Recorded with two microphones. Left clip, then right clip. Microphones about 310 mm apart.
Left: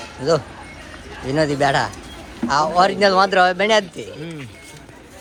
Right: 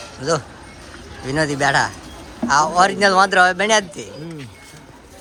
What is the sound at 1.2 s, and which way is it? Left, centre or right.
Speech, centre.